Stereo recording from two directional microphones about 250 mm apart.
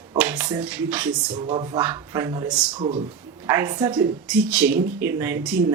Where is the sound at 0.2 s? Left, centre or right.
Centre.